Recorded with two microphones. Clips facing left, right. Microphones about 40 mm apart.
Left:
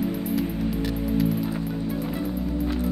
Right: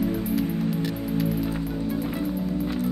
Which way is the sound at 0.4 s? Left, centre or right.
Centre.